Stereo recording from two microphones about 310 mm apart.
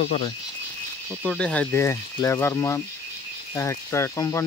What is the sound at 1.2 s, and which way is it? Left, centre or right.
Speech, centre.